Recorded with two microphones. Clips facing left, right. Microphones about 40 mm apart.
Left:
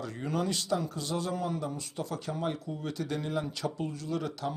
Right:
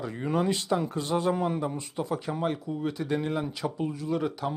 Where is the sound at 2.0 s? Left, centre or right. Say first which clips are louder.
Right 5 dB; centre.